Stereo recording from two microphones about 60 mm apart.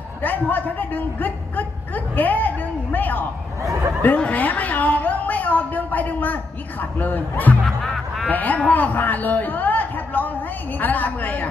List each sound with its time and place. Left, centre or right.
0.2 s a woman's voice: left
3.6 s speech: right
4.2 s a woman's voice: left
7.6 s music: centre
8.3 s a woman's voice: left